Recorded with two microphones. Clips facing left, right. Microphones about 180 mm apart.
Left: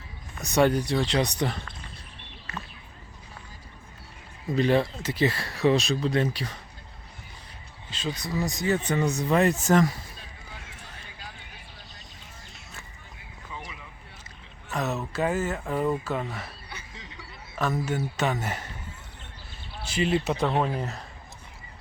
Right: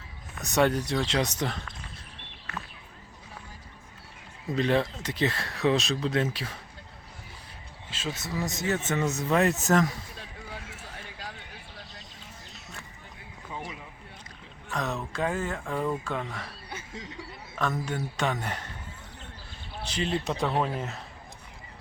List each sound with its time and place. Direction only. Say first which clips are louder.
0.3 s speech: left 2 dB; centre (ahead or behind)
4.5 s speech: left 3 dB; centre (ahead or behind)
7.9 s speech: left 3 dB; 5° right (ahead or behind)
14.7 s speech: left 2 dB; 5° left (ahead or behind)
16.6 s snicker: right 4 dB; 45° right (ahead or behind)
17.5 s speech: left 3 dB; 5° left (ahead or behind)
19.8 s speech: left 4 dB; 10° left (ahead or behind)